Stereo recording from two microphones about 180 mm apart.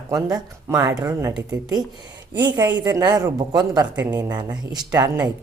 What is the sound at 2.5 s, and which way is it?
A woman's voice, 20° right (ahead or behind).